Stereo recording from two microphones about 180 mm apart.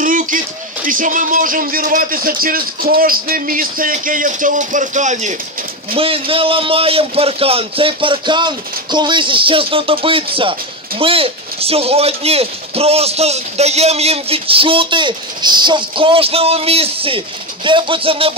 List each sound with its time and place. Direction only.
0.0 s music: 50° right (ahead or behind)
0.8 s a man's voice: 50° right (ahead or behind)
5.9 s speech: 30° right (ahead or behind)